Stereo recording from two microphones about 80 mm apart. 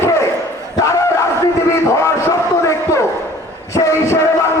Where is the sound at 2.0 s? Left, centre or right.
Left.